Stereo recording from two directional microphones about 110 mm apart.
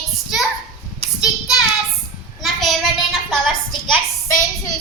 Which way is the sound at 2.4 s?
Centre (ahead or behind).